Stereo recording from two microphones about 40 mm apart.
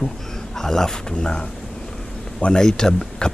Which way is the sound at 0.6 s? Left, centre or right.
Centre.